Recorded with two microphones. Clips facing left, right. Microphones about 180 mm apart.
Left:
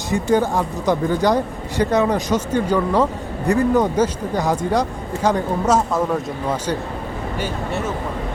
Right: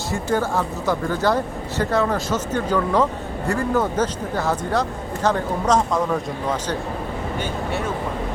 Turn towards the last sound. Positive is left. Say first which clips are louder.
# left 2 dB
turn(degrees=10)  # may be behind; listen again after turning